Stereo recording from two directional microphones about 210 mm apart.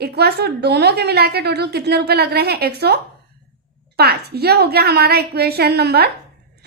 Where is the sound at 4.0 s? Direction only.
50° right (ahead or behind).